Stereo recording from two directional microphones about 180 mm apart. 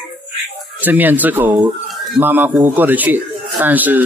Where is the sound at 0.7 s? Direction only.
10° right (ahead or behind).